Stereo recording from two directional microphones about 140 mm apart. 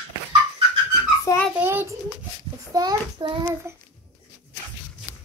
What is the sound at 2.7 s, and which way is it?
Speech, 30° right (ahead or behind).